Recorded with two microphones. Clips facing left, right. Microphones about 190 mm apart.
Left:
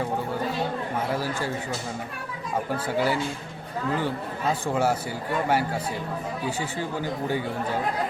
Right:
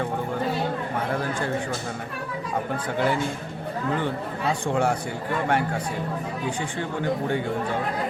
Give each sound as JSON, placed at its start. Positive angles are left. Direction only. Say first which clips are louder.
{"t": 1.1, "sound": "speech", "louder": "right 2 dB", "side_deg": 5}
{"t": 2.7, "sound": "speech", "louder": "even", "side_deg": 5}